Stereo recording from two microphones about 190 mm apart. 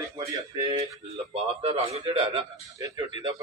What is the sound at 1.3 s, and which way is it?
A man's voice, 30° right (ahead or behind).